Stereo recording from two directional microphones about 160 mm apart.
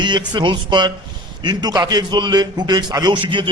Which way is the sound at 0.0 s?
30° right (ahead or behind).